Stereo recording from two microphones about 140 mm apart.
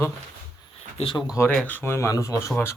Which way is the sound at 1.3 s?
20° left (ahead or behind).